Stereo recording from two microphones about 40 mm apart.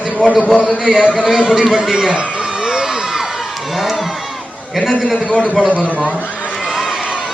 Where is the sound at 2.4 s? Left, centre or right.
Centre.